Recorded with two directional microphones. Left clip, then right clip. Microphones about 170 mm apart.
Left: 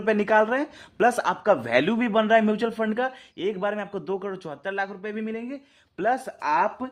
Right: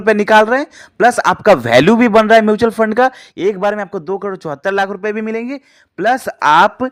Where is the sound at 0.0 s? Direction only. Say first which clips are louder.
Right 11 dB; 35° right (ahead or behind).